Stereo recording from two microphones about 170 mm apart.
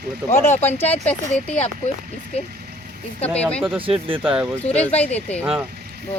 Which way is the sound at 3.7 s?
30° right (ahead or behind).